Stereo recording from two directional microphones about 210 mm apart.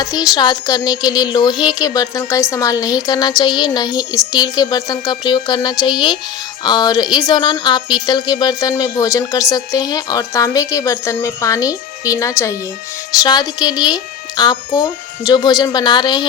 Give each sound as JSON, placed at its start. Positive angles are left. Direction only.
{"t": 0.0, "sound": "speech", "side_deg": 15}